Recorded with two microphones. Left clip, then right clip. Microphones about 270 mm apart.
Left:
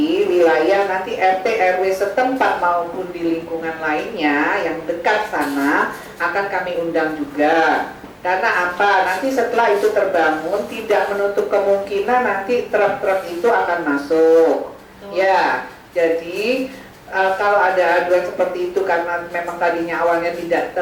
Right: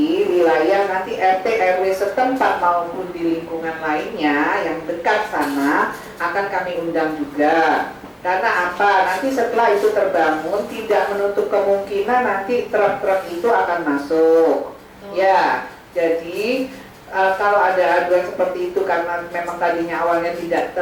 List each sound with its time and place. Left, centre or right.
0.3 s a sound: centre
2.1 s a woman's voice: centre
15.1 s a woman's voice: centre